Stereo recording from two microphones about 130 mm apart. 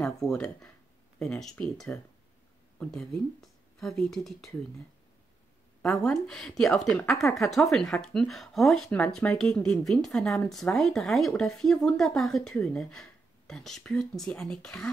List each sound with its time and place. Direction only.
0.3 s a woman's voice: 5° left (ahead or behind)
6.0 s a woman's voice: 5° left (ahead or behind)